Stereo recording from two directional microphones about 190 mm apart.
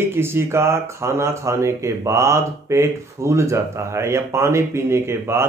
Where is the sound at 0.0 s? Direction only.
10° right (ahead or behind).